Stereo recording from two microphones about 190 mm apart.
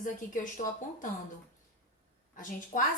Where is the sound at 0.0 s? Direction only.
45° left (ahead or behind).